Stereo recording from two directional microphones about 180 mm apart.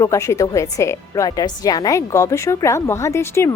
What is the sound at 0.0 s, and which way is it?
A woman's voice, 15° left (ahead or behind).